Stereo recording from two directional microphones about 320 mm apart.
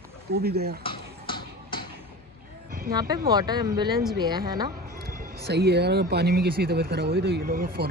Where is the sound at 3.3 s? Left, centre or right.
Centre.